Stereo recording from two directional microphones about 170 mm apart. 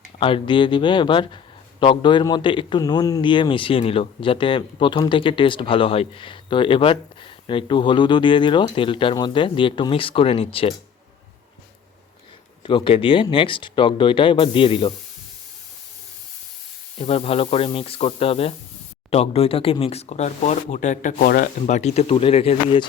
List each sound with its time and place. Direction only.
0.2 s a man's voice: 30° left (ahead or behind)
12.6 s speech: 30° left (ahead or behind)
17.0 s speech: 35° left (ahead or behind); by 21.5 s 60° left (ahead or behind)
21.7 s speech: 40° left (ahead or behind)